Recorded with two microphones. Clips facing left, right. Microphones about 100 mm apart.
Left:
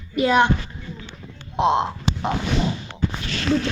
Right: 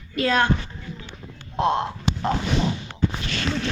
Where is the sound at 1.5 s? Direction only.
20° left (ahead or behind).